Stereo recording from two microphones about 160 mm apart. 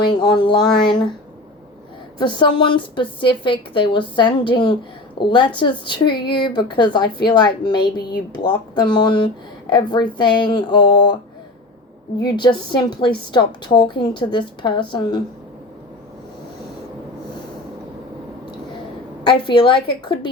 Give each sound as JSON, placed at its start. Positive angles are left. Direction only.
{"t": 0.0, "sound": "speech", "side_deg": 25}
{"t": 2.1, "sound": "speech", "side_deg": 30}
{"t": 12.2, "sound": "speech", "side_deg": 30}
{"t": 19.5, "sound": "a woman's voice", "side_deg": 30}